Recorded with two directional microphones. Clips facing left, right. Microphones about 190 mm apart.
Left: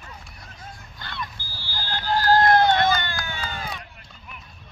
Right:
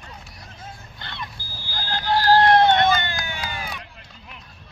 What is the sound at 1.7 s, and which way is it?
Vehicle, 45° right (ahead or behind).